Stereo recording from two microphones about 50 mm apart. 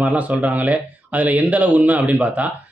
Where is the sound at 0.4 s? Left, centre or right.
Right.